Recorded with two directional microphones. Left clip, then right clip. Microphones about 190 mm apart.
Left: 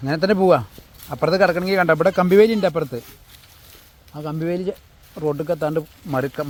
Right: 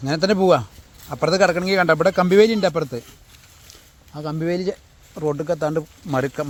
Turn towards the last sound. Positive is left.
turn(degrees=-10)  # may be behind; listen again after turning